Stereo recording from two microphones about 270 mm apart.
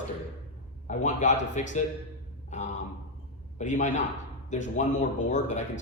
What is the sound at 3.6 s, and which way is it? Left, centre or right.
A man's voice, left.